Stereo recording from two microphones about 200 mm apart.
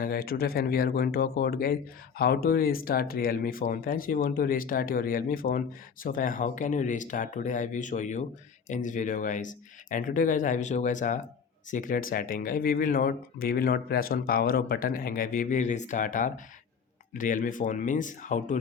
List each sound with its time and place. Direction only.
0.0 s speech: 50° left (ahead or behind)